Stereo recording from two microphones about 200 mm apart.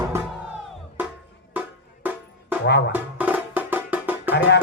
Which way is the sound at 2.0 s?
10° right (ahead or behind).